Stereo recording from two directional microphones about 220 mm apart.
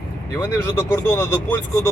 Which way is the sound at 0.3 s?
15° left (ahead or behind).